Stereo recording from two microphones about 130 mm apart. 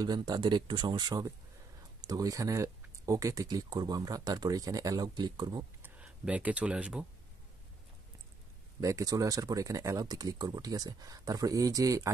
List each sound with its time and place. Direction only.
0.0 s speech: 30° right (ahead or behind)
5.8 s speech: 10° right (ahead or behind)
8.8 s speech: 25° right (ahead or behind)